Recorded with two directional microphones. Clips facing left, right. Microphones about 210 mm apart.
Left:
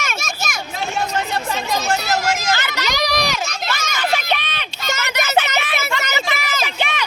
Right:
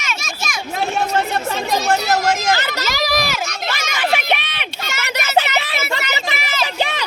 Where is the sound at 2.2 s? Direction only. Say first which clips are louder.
Right 3 dB; 40° right (ahead or behind).